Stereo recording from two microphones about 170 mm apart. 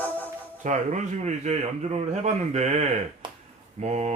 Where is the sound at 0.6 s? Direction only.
45° right (ahead or behind).